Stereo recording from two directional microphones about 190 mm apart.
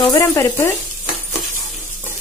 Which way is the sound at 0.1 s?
15° left (ahead or behind).